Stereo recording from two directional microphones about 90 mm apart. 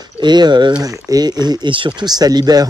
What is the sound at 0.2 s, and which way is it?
Speech, 55° right (ahead or behind).